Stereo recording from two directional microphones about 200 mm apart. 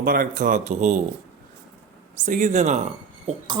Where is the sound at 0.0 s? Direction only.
45° right (ahead or behind).